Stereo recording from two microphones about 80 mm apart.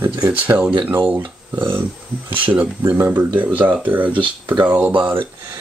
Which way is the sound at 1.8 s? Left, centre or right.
Right.